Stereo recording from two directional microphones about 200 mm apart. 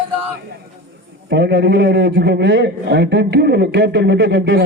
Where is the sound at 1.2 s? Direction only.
55° right (ahead or behind).